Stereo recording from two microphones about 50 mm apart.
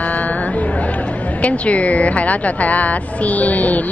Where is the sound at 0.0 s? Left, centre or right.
Left.